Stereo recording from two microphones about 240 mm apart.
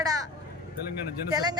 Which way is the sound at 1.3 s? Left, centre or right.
Centre.